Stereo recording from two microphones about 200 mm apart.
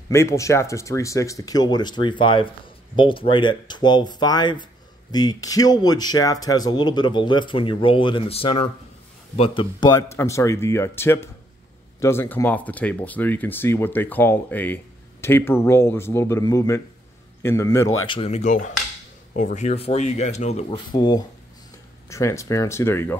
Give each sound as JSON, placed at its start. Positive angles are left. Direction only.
{"t": 0.1, "sound": "speech", "side_deg": 15}
{"t": 18.0, "sound": "speech", "side_deg": 25}